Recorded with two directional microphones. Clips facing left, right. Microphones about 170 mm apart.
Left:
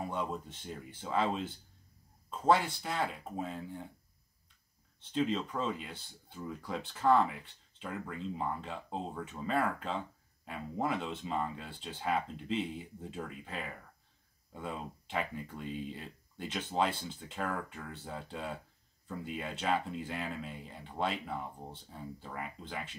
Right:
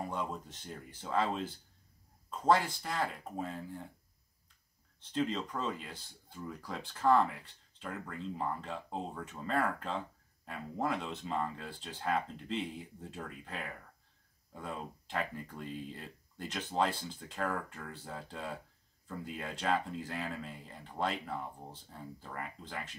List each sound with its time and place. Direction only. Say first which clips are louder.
0.1 s speech: left 1 dB; centre (ahead or behind)
5.1 s speech: left 2 dB; centre (ahead or behind)